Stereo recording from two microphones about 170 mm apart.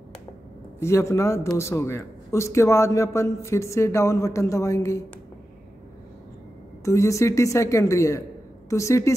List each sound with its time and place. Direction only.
0.7 s a man's voice: 15° left (ahead or behind)
6.8 s a man's voice: 15° left (ahead or behind)